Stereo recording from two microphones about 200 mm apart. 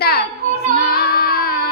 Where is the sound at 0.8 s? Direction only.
50° left (ahead or behind).